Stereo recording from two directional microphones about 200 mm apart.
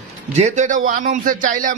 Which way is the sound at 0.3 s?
35° right (ahead or behind).